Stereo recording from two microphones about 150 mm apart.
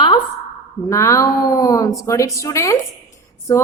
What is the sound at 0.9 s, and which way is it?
A woman's voice, 20° left (ahead or behind).